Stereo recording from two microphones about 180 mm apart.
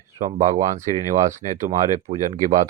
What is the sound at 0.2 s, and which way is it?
Speech, 45° right (ahead or behind).